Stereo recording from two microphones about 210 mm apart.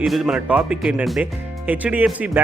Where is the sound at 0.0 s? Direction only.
Centre (ahead or behind).